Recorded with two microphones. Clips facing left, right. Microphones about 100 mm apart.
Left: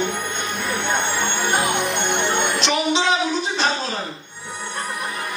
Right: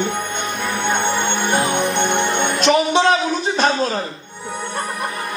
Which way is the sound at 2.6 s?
50° right (ahead or behind).